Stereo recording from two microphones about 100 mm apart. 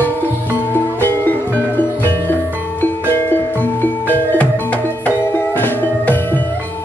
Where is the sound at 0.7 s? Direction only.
20° left (ahead or behind).